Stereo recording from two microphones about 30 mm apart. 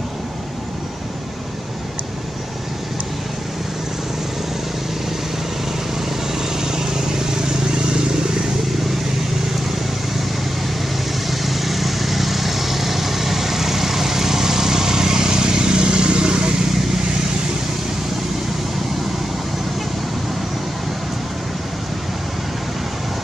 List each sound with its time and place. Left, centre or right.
6.3 s vehicle: centre
11.2 s vehicle: centre; by 16.6 s right